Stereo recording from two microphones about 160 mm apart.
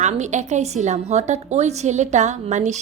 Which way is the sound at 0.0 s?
45° right (ahead or behind).